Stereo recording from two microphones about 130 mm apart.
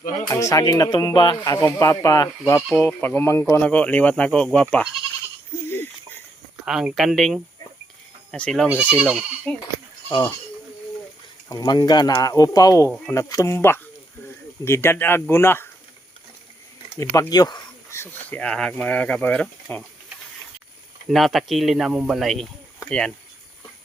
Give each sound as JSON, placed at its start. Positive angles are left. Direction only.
{"t": 0.3, "sound": "speech", "side_deg": 25}
{"t": 2.6, "sound": "speech", "side_deg": 0}
{"t": 2.8, "sound": "speech", "side_deg": 15}
{"t": 5.6, "sound": "a sound", "side_deg": 15}
{"t": 6.7, "sound": "speech", "side_deg": -5}
{"t": 8.6, "sound": "speech", "side_deg": -10}
{"t": 11.4, "sound": "speech", "side_deg": 30}
{"t": 17.0, "sound": "speech", "side_deg": 25}
{"t": 17.8, "sound": "speech", "side_deg": 20}
{"t": 21.1, "sound": "speech", "side_deg": 0}